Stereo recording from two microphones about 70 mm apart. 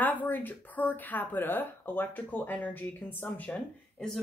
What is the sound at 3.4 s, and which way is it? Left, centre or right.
Speech, centre.